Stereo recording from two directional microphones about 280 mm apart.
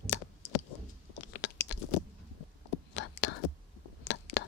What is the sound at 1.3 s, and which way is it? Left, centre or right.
Chewing, left.